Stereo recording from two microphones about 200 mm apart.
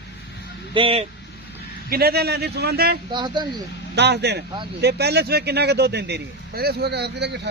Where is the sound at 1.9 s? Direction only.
50° right (ahead or behind).